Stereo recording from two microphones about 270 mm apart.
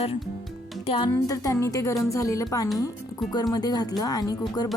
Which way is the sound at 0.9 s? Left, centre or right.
Centre.